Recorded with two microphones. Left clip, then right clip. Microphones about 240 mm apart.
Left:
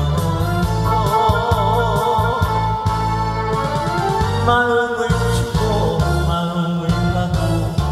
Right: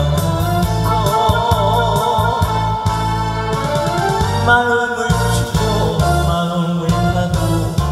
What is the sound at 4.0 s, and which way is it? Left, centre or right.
Music, right.